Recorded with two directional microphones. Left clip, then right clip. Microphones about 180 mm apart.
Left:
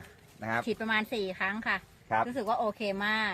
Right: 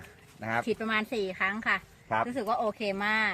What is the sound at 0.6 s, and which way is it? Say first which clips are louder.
Speech: right 1 dB; 15° left (ahead or behind).